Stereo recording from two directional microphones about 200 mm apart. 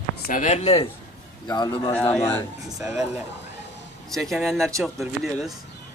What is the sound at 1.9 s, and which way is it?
Speech, 10° left (ahead or behind).